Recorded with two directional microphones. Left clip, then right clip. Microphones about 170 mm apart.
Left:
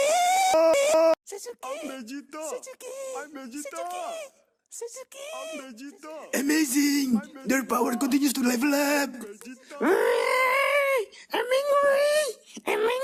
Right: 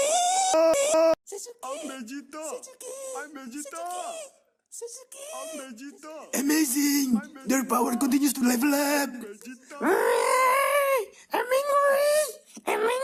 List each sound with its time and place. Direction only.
0.0 s a sound: 50° left (ahead or behind)
1.3 s speech: 50° left (ahead or behind)
2.0 s speech: 25° left (ahead or behind)
2.6 s speech: 55° left (ahead or behind)
3.2 s speech: 25° left (ahead or behind)
3.8 s speech: 50° left (ahead or behind)
5.6 s speech: 30° left (ahead or behind)